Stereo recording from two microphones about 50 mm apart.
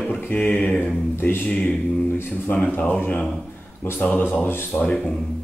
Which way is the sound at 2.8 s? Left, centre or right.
Left.